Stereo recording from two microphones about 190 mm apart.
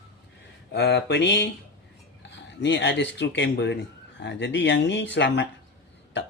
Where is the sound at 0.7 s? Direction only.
60° left (ahead or behind).